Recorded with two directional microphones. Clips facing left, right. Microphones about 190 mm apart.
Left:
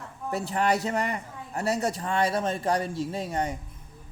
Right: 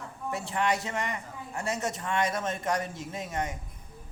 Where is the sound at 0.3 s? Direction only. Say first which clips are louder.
Left 3 dB; 35° left (ahead or behind).